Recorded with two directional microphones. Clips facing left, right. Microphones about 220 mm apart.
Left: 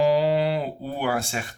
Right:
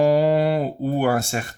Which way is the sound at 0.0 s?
50° right (ahead or behind).